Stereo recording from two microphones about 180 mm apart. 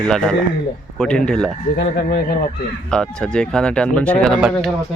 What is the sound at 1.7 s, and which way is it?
Speech, 65° left (ahead or behind).